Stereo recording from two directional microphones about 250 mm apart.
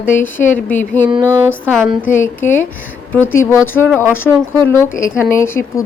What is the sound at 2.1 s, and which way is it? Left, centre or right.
A woman's voice, centre.